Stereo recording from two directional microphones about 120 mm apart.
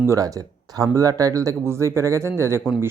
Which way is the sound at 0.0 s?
25° right (ahead or behind).